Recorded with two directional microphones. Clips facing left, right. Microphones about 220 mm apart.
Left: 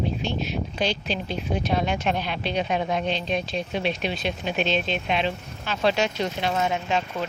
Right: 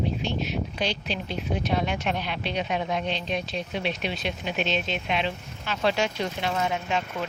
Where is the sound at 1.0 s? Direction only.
35° left (ahead or behind).